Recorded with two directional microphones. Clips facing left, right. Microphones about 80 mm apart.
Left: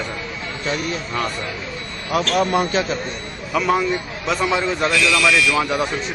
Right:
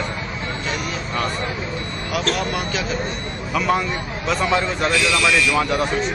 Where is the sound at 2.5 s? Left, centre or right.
Left.